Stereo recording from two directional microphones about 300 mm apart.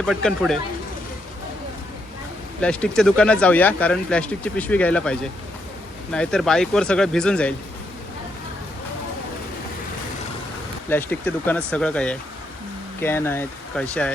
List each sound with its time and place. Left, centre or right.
0.0 s speech: centre
2.6 s speech: centre
10.8 s speech: centre